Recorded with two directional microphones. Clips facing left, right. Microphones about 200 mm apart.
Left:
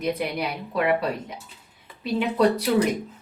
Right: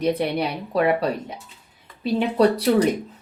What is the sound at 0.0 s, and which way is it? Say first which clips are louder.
Speech: right 4 dB; 30° right (ahead or behind).